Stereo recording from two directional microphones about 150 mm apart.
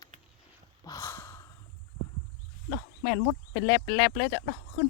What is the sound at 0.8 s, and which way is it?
Gasp, 20° left (ahead or behind).